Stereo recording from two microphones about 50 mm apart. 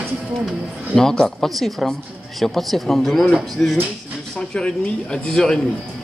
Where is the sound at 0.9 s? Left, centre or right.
Centre.